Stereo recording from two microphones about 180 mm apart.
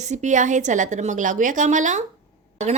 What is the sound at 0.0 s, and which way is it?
A woman's voice, 40° right (ahead or behind).